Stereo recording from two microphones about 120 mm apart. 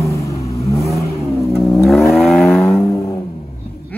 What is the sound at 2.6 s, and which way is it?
Vehicle, 25° left (ahead or behind).